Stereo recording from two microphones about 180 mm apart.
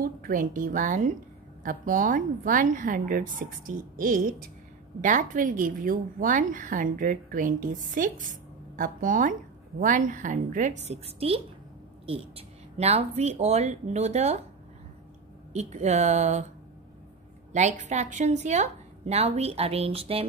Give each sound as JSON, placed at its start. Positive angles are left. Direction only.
{"t": 0.2, "sound": "a woman's voice", "side_deg": -50}
{"t": 15.5, "sound": "a woman's voice", "side_deg": -40}
{"t": 17.5, "sound": "a woman's voice", "side_deg": -40}